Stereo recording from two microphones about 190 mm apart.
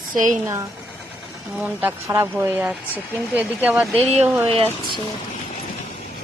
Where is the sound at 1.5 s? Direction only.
5° right (ahead or behind).